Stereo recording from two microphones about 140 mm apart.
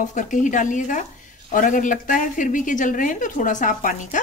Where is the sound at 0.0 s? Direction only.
65° left (ahead or behind).